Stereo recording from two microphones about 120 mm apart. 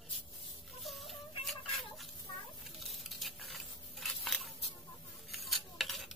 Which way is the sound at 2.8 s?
Centre (ahead or behind).